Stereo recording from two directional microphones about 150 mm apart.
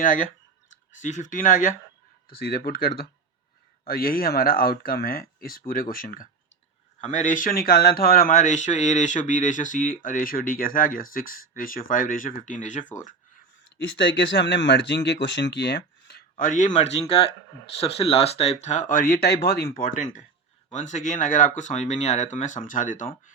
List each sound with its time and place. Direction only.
0.0 s speech: 60° left (ahead or behind)
2.3 s speech: 90° left; by 6.2 s 70° left (ahead or behind)
7.0 s speech: 55° left (ahead or behind)
15.0 s speech: 90° left
16.4 s speech: 60° left (ahead or behind)
20.7 s speech: 55° left (ahead or behind)